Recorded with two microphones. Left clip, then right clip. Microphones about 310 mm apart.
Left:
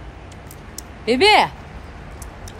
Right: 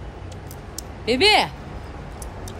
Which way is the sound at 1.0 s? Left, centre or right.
Left.